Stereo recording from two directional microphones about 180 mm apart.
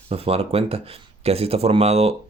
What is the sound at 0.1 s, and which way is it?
Speech, 35° right (ahead or behind).